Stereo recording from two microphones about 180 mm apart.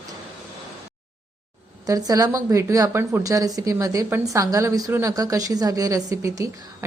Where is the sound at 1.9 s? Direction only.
20° right (ahead or behind).